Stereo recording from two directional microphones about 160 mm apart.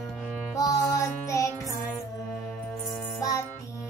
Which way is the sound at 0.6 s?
20° left (ahead or behind).